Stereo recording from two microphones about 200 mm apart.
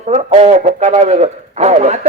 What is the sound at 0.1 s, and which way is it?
A man's voice, 30° right (ahead or behind).